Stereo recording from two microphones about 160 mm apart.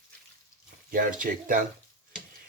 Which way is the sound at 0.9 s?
60° right (ahead or behind).